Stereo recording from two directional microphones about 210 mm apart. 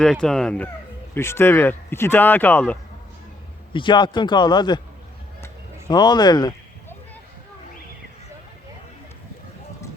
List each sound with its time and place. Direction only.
0.0 s speech: 5° left (ahead or behind)
3.7 s a man's voice: 25° left (ahead or behind)
5.9 s a man's voice: 20° left (ahead or behind)